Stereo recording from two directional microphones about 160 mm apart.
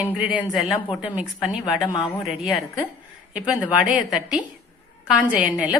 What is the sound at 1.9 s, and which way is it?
Speech, 30° left (ahead or behind).